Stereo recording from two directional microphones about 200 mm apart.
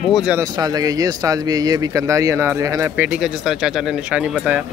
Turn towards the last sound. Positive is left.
turn(degrees=-5)  # may be behind; listen again after turning